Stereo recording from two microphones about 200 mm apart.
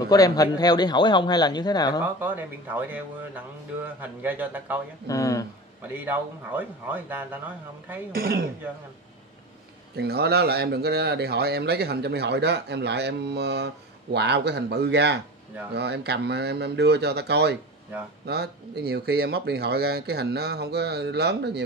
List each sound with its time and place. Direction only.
0.1 s a man's voice: 20° left (ahead or behind)
2.1 s speech: 10° right (ahead or behind)
5.0 s speech: 15° left (ahead or behind)
5.9 s speech: 10° right (ahead or behind)
8.1 s speech: 50° right (ahead or behind)
9.9 s speech: 55° right (ahead or behind)